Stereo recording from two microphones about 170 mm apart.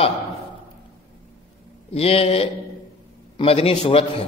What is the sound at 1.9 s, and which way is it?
A man's voice, 35° left (ahead or behind).